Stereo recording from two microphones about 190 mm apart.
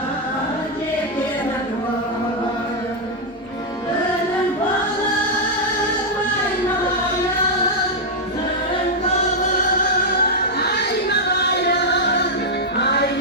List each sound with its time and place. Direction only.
10.2 s music: 55° left (ahead or behind)